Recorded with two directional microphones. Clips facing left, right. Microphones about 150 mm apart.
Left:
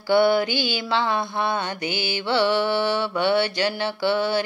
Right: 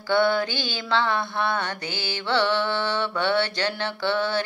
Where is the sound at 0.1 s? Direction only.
10° left (ahead or behind).